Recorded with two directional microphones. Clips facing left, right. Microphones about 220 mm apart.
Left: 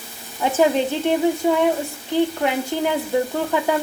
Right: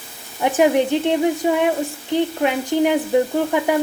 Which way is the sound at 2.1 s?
20° right (ahead or behind).